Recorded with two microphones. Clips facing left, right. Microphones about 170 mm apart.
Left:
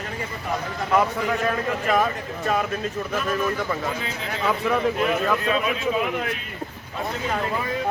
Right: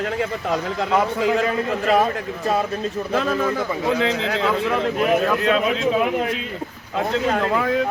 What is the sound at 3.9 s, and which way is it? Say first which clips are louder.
Speech: right 9 dB; 90° right.